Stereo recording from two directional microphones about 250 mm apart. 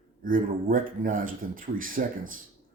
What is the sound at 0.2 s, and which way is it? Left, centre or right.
Speech, right.